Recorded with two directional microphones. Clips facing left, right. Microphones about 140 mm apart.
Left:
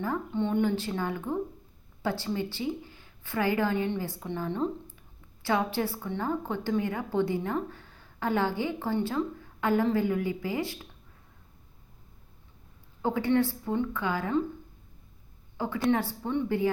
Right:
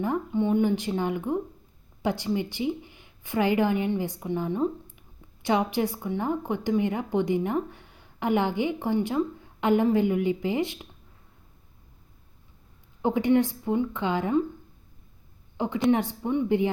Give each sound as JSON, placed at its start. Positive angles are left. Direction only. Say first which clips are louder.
{"t": 0.0, "sound": "speech", "louder": "right 4 dB", "side_deg": -15}
{"t": 13.0, "sound": "speech", "louder": "right 3 dB", "side_deg": -20}
{"t": 15.5, "sound": "a woman's voice", "louder": "right 3 dB", "side_deg": -20}